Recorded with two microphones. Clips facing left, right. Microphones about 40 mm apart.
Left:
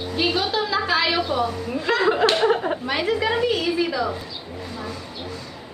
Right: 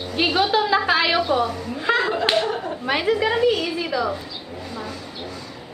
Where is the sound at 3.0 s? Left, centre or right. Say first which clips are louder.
Right 3 dB; centre.